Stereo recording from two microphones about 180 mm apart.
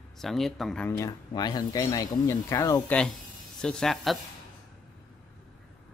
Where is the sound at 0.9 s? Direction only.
20° left (ahead or behind).